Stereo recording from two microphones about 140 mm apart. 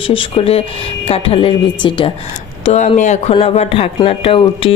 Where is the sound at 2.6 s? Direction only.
50° left (ahead or behind).